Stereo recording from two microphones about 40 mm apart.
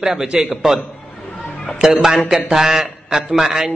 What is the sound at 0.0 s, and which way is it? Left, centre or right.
Speech, centre.